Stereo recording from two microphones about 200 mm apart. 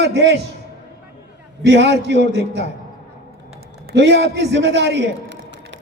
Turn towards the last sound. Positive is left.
turn(degrees=-60)  # may be behind; listen again after turning